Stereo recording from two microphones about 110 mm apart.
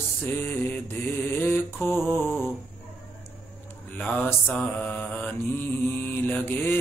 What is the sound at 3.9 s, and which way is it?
Mantra, 15° left (ahead or behind).